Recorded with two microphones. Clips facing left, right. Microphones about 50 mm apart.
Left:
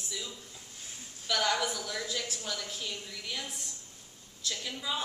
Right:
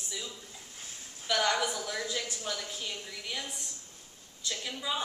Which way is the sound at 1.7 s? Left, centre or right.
Centre.